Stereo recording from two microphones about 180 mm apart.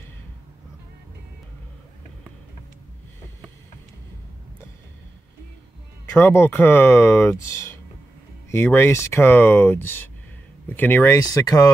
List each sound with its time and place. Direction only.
6.1 s speech: 15° left (ahead or behind)